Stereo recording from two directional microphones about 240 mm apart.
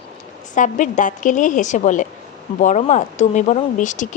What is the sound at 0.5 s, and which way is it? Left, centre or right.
A woman's voice, left.